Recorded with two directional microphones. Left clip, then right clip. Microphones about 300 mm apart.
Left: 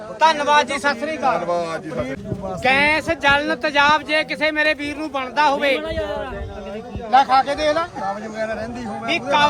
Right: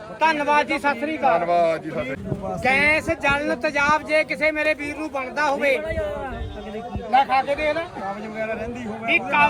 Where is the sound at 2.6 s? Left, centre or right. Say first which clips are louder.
Left 2 dB; centre.